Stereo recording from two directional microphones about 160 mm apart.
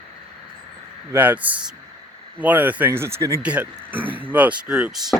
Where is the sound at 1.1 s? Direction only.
10° right (ahead or behind).